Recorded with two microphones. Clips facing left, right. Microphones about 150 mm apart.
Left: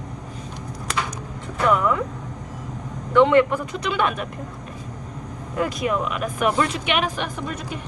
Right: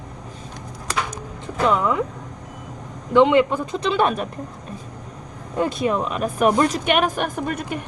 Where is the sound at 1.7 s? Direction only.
20° right (ahead or behind).